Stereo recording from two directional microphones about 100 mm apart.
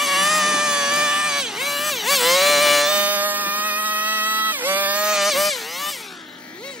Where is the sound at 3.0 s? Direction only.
15° right (ahead or behind).